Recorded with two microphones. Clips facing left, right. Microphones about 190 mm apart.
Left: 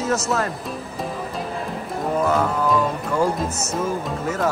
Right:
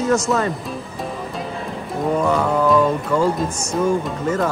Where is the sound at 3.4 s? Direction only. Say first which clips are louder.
Right 3 dB; 5° left (ahead or behind).